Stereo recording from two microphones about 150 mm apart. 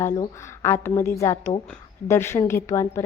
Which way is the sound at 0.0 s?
20° left (ahead or behind).